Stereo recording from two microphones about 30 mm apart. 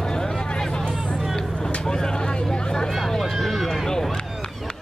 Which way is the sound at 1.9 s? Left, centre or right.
Left.